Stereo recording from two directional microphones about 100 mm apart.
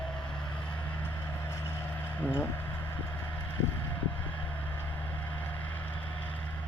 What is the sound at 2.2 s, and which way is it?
Speech, 20° left (ahead or behind).